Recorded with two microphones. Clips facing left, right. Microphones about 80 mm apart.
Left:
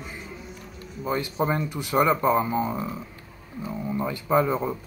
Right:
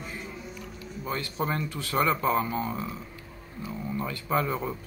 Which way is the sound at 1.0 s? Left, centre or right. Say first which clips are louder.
Left 5 dB; centre.